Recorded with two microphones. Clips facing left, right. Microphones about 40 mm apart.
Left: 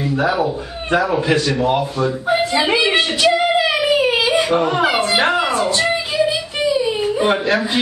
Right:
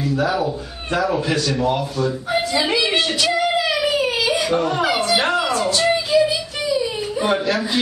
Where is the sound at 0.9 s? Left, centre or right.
Centre.